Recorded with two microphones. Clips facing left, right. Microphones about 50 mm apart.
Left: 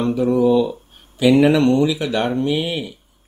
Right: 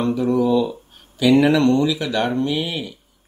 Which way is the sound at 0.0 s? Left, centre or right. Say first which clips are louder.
Left 2 dB; centre.